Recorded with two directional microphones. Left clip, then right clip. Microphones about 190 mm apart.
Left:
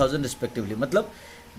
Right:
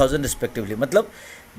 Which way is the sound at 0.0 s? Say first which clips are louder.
Right 4 dB; 20° right (ahead or behind).